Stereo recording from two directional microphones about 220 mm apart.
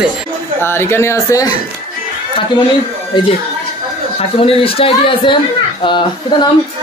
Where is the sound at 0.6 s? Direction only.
10° left (ahead or behind).